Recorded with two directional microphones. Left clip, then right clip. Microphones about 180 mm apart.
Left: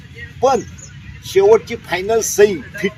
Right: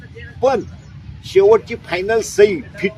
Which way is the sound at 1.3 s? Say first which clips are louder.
Even; centre (ahead or behind).